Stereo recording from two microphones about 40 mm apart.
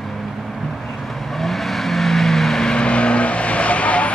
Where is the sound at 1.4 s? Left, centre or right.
Centre.